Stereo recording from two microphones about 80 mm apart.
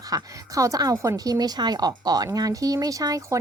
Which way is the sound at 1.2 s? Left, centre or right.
Right.